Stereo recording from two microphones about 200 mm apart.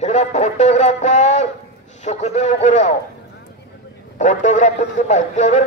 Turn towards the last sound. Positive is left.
turn(degrees=35)  # may be behind; listen again after turning